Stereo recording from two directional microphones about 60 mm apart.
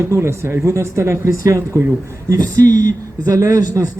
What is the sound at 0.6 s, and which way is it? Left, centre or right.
Speech, right.